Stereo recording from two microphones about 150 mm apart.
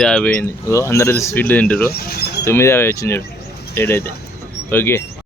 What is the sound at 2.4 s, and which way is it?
Speech, 15° left (ahead or behind).